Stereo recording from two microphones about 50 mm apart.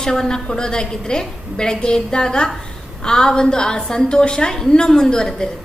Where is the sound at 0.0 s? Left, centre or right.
Centre.